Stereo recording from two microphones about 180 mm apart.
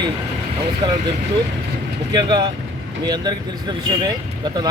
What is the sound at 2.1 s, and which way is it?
Speech, 25° right (ahead or behind).